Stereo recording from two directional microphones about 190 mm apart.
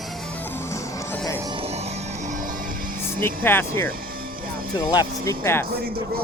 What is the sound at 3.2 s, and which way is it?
Speech, 10° left (ahead or behind).